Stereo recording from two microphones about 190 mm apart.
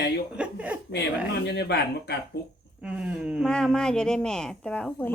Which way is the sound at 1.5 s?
60° left (ahead or behind).